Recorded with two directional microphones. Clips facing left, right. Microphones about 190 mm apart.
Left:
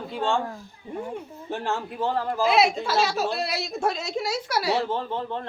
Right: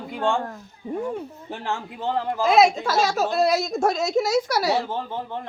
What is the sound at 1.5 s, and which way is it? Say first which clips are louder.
Speech: left 3 dB; 20° right (ahead or behind).